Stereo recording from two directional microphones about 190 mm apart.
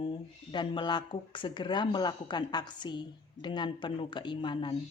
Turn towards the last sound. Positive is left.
turn(degrees=25)  # may be behind; listen again after turning